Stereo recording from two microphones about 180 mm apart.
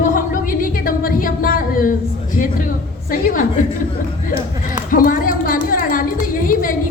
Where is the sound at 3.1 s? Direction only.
50° left (ahead or behind).